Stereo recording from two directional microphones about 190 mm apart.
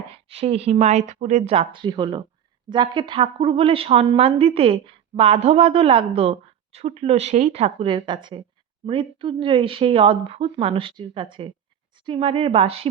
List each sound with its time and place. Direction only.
0.1 s a woman's voice: 30° right (ahead or behind)